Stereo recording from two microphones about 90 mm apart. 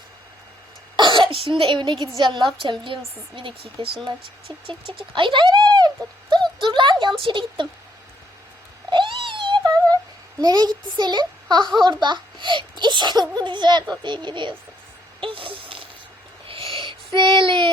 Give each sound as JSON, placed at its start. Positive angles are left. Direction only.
{"t": 0.9, "sound": "a woman's voice", "side_deg": -60}
{"t": 4.0, "sound": "a child's voice", "side_deg": -90}
{"t": 6.3, "sound": "a sound", "side_deg": -55}
{"t": 7.2, "sound": "a woman's voice", "side_deg": -65}
{"t": 8.9, "sound": "cat", "side_deg": -65}
{"t": 10.4, "sound": "a child's voice", "side_deg": -45}
{"t": 15.2, "sound": "a sound", "side_deg": -75}
{"t": 16.7, "sound": "child singing", "side_deg": -60}